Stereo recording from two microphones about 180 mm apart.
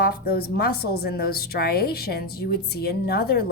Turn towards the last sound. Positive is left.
turn(degrees=60)  # may be behind; listen again after turning